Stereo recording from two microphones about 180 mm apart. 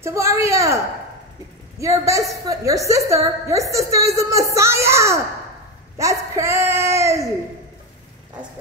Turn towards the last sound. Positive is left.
turn(degrees=-15)  # may be behind; listen again after turning